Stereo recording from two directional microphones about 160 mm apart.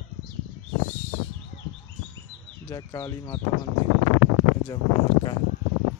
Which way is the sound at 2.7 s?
20° left (ahead or behind).